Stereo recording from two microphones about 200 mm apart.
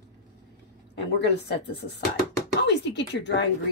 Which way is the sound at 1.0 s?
60° left (ahead or behind).